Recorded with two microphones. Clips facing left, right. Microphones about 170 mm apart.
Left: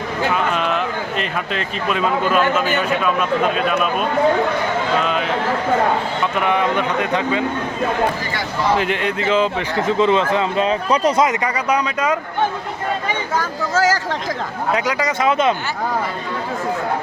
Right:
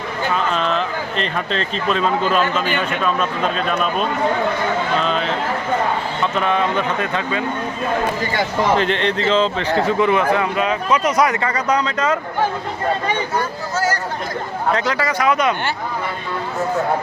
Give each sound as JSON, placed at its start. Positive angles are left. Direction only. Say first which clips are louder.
{"t": 0.3, "sound": "speech", "louder": "right 3 dB", "side_deg": 10}
{"t": 5.0, "sound": "a sound", "louder": "even", "side_deg": 10}
{"t": 6.3, "sound": "speech", "louder": "left 1 dB", "side_deg": 15}
{"t": 8.8, "sound": "speech", "louder": "right 2 dB", "side_deg": 10}
{"t": 9.8, "sound": "speech", "louder": "left 2 dB", "side_deg": 20}
{"t": 11.2, "sound": "speech", "louder": "even", "side_deg": 15}
{"t": 13.3, "sound": "speech", "louder": "left 2 dB", "side_deg": 90}
{"t": 14.8, "sound": "speech", "louder": "even", "side_deg": 15}